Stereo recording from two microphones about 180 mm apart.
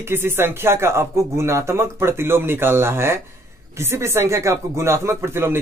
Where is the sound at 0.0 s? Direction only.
15° right (ahead or behind).